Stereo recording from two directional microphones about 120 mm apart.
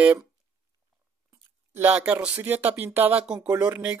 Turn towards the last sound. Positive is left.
turn(degrees=-10)  # may be behind; listen again after turning